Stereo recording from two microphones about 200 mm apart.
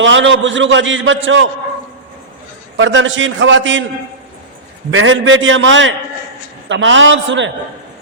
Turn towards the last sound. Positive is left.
turn(degrees=-65)  # may be behind; listen again after turning